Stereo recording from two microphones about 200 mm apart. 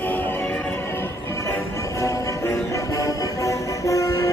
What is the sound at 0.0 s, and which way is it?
Music, 10° left (ahead or behind).